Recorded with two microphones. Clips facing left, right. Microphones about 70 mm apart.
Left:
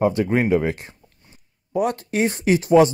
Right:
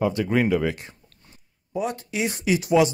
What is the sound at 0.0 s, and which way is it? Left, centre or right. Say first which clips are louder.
Speech: left 3 dB; left.